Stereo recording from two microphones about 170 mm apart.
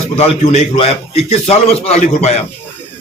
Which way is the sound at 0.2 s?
35° left (ahead or behind).